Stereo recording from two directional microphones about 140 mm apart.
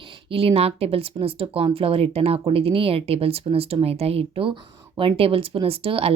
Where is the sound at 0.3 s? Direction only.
40° right (ahead or behind).